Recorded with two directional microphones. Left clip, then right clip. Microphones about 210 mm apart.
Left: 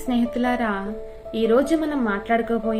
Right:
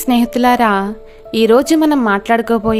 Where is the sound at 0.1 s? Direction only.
55° right (ahead or behind).